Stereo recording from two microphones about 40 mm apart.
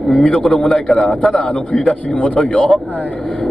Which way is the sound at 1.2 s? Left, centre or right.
Left.